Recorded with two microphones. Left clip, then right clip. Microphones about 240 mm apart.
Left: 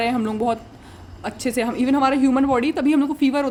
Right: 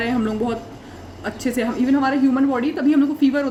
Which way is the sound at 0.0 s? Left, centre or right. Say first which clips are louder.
Left 1 dB; left.